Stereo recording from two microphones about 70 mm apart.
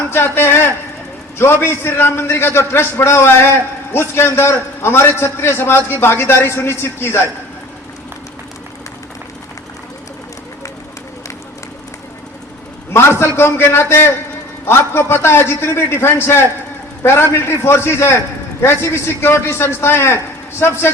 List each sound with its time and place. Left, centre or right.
0.1 s a man's voice: left
12.9 s a man's voice: left